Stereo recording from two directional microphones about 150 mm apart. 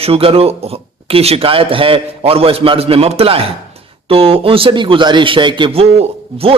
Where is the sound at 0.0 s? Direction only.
40° right (ahead or behind).